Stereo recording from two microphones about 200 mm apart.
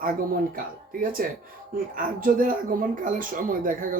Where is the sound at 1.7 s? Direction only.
45° right (ahead or behind).